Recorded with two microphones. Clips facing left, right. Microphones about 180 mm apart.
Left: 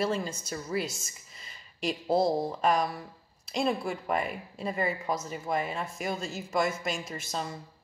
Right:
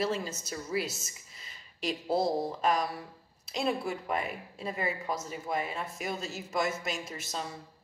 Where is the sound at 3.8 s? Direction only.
Centre (ahead or behind).